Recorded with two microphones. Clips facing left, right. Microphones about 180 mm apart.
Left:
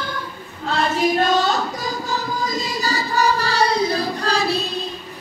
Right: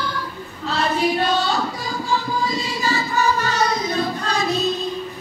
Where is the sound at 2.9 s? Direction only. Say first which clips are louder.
Even; 35° left (ahead or behind).